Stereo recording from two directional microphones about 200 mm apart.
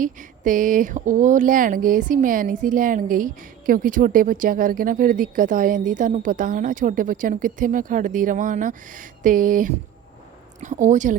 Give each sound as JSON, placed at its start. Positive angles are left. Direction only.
{"t": 0.0, "sound": "speech", "side_deg": -40}